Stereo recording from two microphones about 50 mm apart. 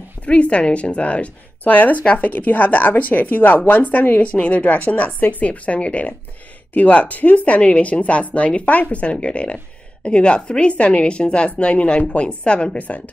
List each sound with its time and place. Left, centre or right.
0.2 s a woman's voice: left
12.8 s a woman's voice: left